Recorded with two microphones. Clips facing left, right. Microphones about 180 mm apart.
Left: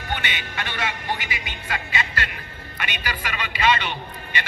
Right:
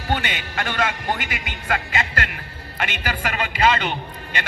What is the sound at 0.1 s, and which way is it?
A man's voice, 45° right (ahead or behind).